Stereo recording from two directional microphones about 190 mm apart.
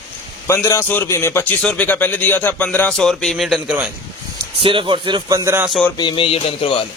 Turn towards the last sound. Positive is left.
turn(degrees=30)  # may be behind; listen again after turning